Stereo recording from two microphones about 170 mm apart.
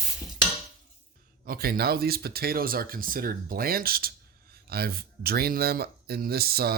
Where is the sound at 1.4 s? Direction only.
60° right (ahead or behind).